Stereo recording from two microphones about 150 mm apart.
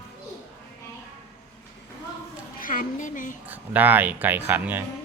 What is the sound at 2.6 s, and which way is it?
Speech, 65° left (ahead or behind).